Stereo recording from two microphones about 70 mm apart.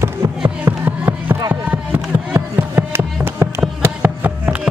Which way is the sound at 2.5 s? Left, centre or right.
Right.